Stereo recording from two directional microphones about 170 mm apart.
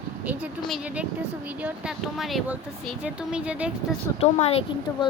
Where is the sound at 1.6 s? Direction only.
5° right (ahead or behind).